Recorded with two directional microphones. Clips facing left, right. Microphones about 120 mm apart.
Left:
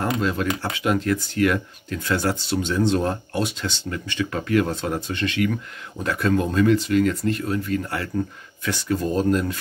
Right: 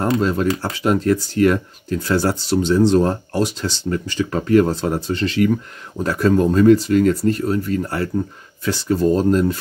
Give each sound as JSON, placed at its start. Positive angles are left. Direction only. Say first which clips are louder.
{"t": 0.0, "sound": "speech", "louder": "right 5 dB", "side_deg": -35}